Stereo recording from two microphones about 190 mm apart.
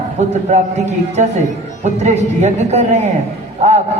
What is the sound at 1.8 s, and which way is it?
A man's voice, 35° right (ahead or behind).